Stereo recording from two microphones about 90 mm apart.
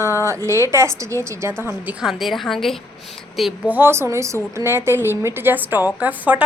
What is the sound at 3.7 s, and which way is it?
A woman's voice, 25° right (ahead or behind).